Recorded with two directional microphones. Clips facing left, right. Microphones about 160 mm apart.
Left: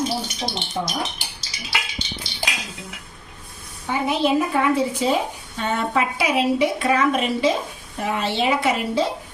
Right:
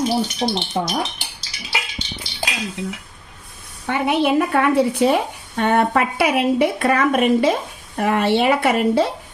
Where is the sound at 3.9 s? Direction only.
65° right (ahead or behind).